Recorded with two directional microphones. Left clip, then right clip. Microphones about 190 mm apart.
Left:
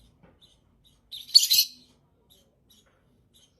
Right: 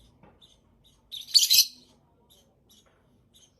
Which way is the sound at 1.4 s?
Centre (ahead or behind).